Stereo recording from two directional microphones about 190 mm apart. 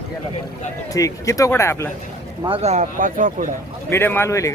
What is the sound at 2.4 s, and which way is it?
Speech, 30° right (ahead or behind).